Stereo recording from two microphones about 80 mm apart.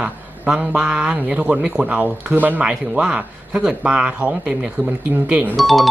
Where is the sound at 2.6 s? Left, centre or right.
Centre.